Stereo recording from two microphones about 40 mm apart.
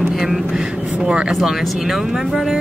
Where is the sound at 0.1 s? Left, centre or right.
Centre.